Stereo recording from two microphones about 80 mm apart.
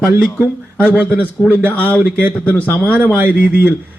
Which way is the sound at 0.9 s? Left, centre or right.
Right.